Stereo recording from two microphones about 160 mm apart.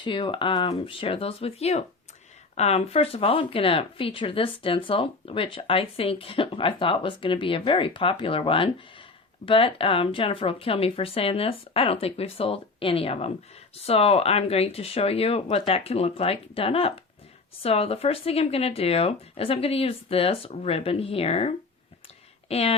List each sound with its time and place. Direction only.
0.0 s speech: 30° left (ahead or behind)